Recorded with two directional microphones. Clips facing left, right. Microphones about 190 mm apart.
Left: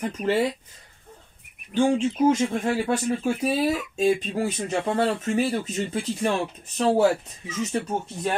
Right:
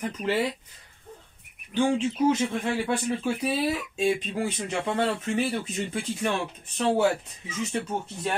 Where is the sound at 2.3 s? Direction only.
40° left (ahead or behind).